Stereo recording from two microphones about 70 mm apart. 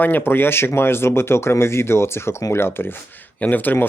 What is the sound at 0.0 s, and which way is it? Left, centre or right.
Speech, left.